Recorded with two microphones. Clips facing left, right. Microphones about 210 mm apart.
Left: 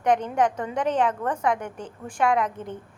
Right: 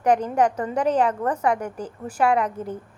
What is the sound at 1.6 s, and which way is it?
Speech, 35° right (ahead or behind).